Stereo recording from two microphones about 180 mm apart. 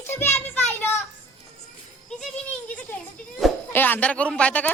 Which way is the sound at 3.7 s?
10° left (ahead or behind).